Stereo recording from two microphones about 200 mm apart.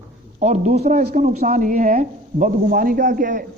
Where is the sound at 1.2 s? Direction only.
35° right (ahead or behind).